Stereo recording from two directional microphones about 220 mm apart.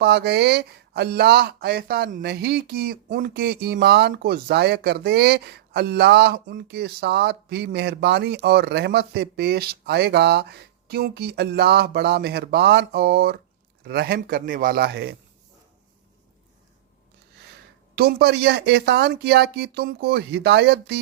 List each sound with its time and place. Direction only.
0.0 s speech: 50° right (ahead or behind)
17.9 s speech: 45° right (ahead or behind)